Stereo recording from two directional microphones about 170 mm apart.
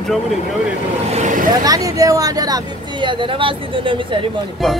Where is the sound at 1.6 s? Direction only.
20° right (ahead or behind).